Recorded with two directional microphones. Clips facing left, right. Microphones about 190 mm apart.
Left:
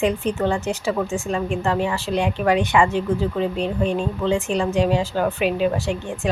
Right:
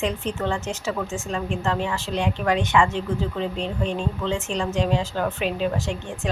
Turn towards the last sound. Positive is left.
turn(degrees=10)  # may be behind; listen again after turning